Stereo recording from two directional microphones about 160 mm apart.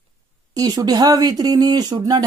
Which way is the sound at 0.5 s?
25° right (ahead or behind).